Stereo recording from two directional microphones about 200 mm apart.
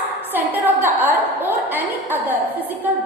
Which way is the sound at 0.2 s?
10° right (ahead or behind).